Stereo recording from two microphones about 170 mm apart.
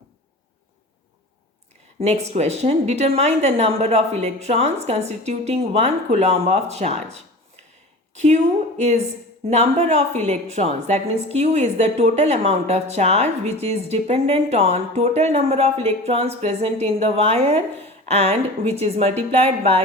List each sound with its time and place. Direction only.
2.0 s a woman's voice: 40° right (ahead or behind)